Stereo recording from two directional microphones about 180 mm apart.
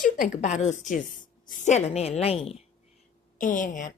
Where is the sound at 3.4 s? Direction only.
45° left (ahead or behind).